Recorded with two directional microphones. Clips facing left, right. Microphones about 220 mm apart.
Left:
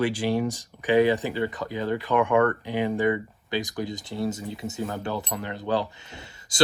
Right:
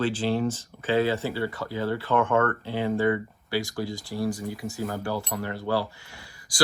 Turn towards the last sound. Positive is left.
turn(degrees=20)  # may be behind; listen again after turning